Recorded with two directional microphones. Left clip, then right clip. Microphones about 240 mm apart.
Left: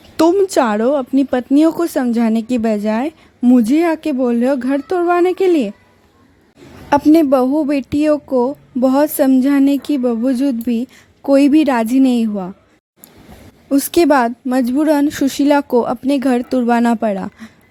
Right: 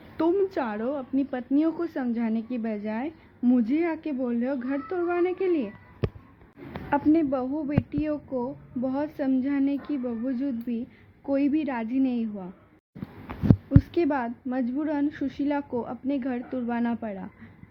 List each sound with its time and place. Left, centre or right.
0.2 s speech: left
6.9 s speech: left
13.7 s speech: left